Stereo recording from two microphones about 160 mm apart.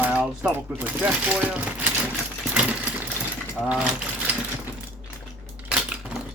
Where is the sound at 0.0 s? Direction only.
10° right (ahead or behind).